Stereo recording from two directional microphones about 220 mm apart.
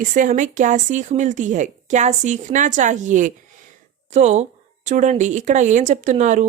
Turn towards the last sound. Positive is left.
turn(degrees=-35)  # may be behind; listen again after turning